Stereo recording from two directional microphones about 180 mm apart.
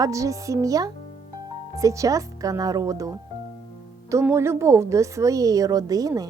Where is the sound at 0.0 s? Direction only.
20° right (ahead or behind).